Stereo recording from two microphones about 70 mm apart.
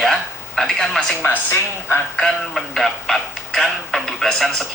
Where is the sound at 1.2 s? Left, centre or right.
Left.